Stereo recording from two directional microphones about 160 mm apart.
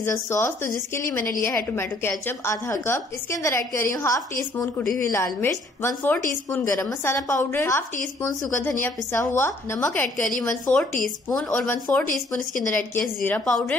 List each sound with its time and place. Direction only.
0.0 s a woman's voice: 20° left (ahead or behind)